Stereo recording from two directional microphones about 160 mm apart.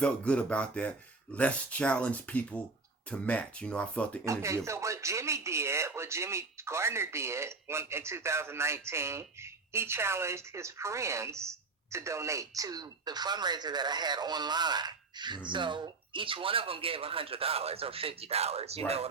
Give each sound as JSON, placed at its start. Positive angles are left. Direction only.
{"t": 0.0, "sound": "speech", "side_deg": 5}
{"t": 4.3, "sound": "speech", "side_deg": -20}